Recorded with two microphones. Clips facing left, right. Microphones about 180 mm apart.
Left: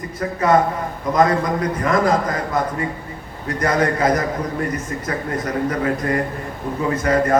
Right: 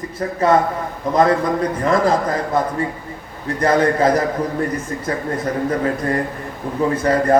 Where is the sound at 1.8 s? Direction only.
30° right (ahead or behind).